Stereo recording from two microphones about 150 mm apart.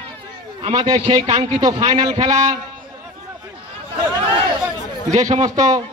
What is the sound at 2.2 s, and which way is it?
Speech, 55° right (ahead or behind).